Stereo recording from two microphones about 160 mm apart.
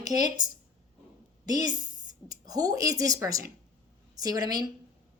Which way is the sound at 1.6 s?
25° right (ahead or behind).